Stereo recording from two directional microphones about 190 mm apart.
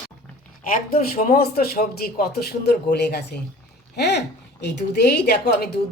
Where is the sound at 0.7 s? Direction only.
45° left (ahead or behind).